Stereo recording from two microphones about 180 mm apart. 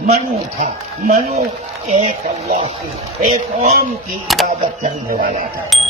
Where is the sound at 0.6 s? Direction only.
40° right (ahead or behind).